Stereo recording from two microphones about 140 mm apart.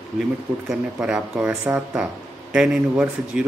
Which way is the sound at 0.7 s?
5° right (ahead or behind).